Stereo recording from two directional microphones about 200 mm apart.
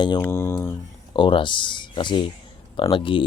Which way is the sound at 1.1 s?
25° left (ahead or behind).